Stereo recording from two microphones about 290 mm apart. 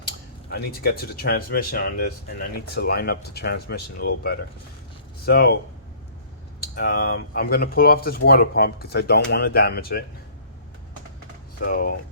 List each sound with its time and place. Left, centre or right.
0.5 s speech: left
6.7 s speech: left
11.6 s speech: left